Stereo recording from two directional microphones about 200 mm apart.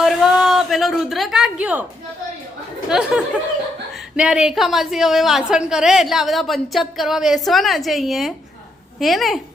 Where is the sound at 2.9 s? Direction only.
5° right (ahead or behind).